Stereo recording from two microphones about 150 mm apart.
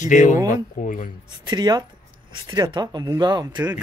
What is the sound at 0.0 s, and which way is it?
Speech, 55° left (ahead or behind).